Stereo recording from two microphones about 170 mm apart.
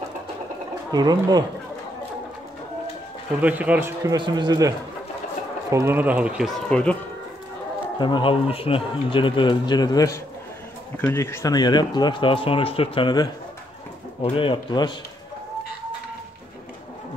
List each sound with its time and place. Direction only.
0.9 s speech: 25° right (ahead or behind)
3.3 s a man's voice: 10° right (ahead or behind)
8.0 s speech: 30° left (ahead or behind)